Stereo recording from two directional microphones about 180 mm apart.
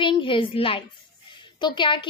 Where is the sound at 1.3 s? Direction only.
25° left (ahead or behind).